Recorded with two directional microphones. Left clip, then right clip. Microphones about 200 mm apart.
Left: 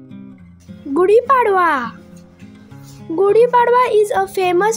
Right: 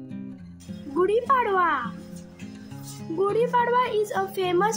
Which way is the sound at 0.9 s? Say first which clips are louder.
Left 9 dB; 35° left (ahead or behind).